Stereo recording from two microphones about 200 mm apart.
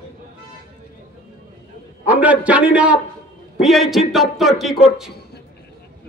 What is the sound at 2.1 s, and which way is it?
Speech, 5° right (ahead or behind).